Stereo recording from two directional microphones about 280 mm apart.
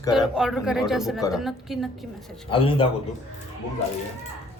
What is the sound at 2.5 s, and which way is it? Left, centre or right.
Speech, centre.